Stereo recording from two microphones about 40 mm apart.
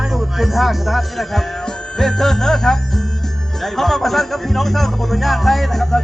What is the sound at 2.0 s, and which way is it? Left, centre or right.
Music, centre.